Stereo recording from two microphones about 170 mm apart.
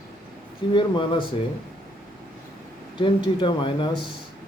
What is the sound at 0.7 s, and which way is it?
Speech, 30° left (ahead or behind).